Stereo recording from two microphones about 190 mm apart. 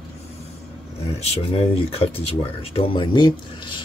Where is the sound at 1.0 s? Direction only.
35° left (ahead or behind).